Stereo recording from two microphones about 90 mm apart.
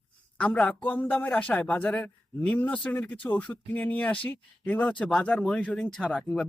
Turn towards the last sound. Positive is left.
turn(degrees=5)  # may be behind; listen again after turning